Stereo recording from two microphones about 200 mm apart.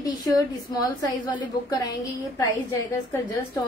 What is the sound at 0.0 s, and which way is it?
A woman's voice, 20° left (ahead or behind).